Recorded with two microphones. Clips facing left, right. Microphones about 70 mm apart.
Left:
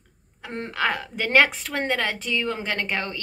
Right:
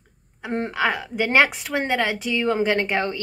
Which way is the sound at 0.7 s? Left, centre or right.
Centre.